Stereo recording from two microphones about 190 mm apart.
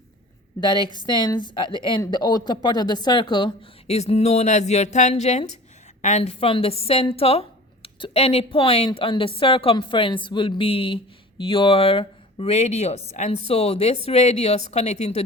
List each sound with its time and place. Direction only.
0.6 s a woman's voice: 25° left (ahead or behind)